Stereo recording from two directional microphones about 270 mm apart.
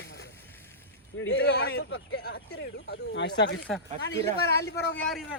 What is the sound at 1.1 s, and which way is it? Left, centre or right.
Speech, left.